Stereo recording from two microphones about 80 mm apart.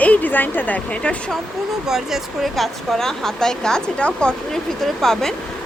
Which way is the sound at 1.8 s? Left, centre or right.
Centre.